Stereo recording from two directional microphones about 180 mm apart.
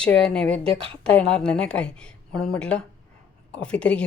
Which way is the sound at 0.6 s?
30° right (ahead or behind).